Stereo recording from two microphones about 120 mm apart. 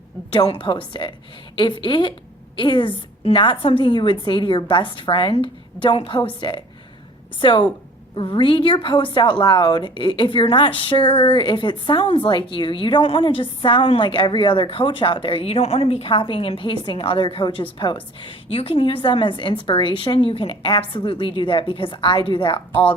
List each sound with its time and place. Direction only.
0.3 s a woman's voice: 45° left (ahead or behind)